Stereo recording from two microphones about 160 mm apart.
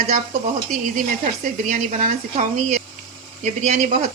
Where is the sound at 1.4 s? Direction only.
55° right (ahead or behind).